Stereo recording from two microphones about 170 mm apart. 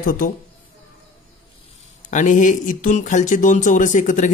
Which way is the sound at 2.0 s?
45° left (ahead or behind).